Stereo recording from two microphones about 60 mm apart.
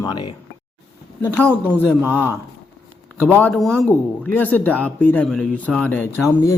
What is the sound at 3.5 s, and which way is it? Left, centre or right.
Speech, centre.